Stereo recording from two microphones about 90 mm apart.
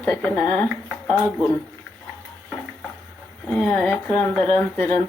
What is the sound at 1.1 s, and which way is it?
Speech, 20° left (ahead or behind).